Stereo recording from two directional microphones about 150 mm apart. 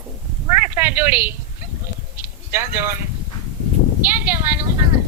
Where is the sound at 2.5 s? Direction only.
15° right (ahead or behind).